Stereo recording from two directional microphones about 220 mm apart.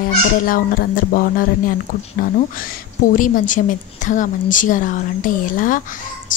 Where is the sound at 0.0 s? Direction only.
40° left (ahead or behind).